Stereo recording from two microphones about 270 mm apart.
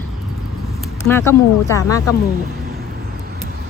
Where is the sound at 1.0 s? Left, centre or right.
Centre.